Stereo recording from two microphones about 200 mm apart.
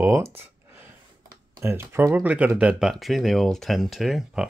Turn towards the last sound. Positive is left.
turn(degrees=0)  # may be behind; listen again after turning